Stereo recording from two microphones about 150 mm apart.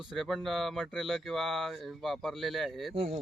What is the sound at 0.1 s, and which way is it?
Speech, centre (ahead or behind).